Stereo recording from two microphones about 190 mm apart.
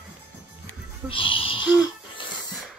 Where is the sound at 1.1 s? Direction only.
25° left (ahead or behind).